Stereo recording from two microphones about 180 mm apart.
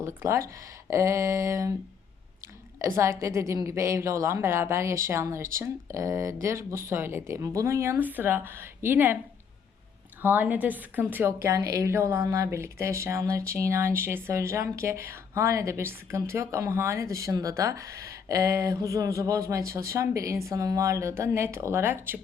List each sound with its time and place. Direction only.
0.0 s a woman's voice: 15° right (ahead or behind)
2.7 s a woman's voice: 15° right (ahead or behind)
10.2 s a woman's voice: 10° right (ahead or behind)